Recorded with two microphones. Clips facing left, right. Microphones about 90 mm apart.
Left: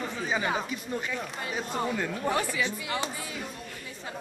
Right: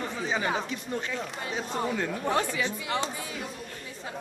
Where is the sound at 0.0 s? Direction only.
5° left (ahead or behind).